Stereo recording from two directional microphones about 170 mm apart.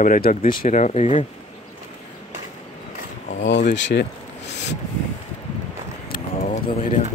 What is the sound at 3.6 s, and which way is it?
Speech, 90° left.